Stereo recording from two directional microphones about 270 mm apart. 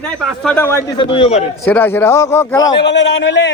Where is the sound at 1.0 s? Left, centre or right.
Centre.